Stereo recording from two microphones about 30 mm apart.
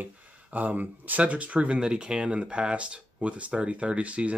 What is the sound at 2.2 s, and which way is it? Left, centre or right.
Speech, right.